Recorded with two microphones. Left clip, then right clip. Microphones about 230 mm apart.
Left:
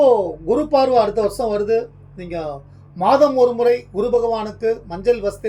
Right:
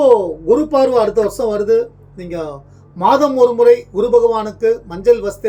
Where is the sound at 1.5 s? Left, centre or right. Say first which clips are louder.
Right 6 dB; centre.